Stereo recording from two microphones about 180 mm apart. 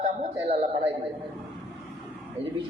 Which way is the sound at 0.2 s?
30° right (ahead or behind).